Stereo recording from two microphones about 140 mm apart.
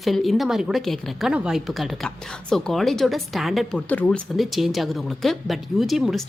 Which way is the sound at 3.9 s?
10° left (ahead or behind).